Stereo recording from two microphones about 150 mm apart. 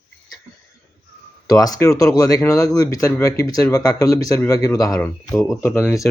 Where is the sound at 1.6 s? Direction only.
25° left (ahead or behind).